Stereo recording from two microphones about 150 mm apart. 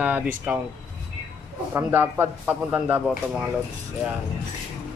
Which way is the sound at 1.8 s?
15° right (ahead or behind).